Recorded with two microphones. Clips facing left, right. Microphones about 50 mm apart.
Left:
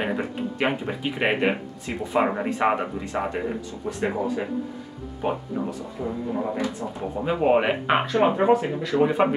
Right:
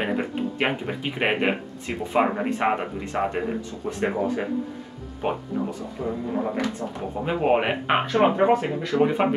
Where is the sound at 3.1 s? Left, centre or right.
Centre.